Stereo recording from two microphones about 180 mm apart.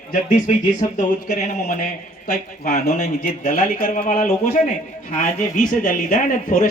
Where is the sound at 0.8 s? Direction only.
35° left (ahead or behind).